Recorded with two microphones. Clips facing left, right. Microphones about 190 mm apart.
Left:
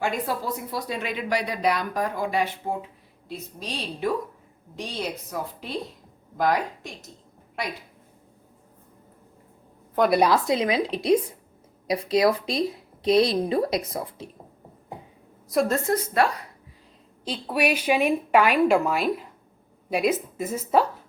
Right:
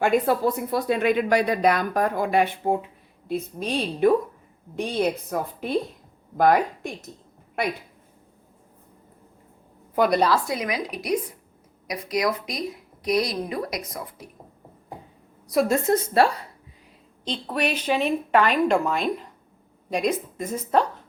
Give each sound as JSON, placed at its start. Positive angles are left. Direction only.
{"t": 0.0, "sound": "a woman's voice", "side_deg": -55}
{"t": 10.1, "sound": "a woman's voice", "side_deg": 15}
{"t": 15.9, "sound": "a woman's voice", "side_deg": -30}
{"t": 17.2, "sound": "a woman's voice", "side_deg": 10}